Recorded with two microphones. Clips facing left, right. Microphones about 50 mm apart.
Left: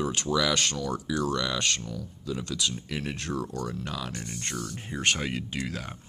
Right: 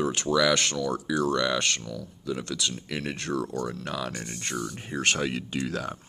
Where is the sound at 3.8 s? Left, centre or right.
Right.